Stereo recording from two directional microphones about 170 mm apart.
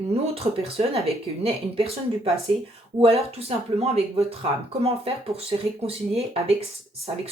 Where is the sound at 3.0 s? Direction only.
35° right (ahead or behind).